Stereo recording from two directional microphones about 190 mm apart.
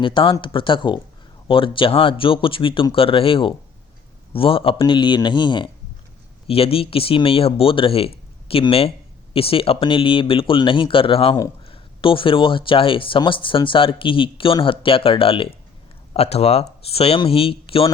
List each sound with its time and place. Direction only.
0.0 s speech: 25° left (ahead or behind)